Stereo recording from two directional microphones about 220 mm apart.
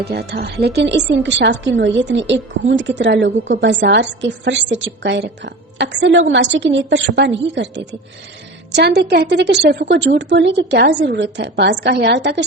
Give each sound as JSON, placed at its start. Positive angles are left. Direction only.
{"t": 0.0, "sound": "a woman's voice", "side_deg": -45}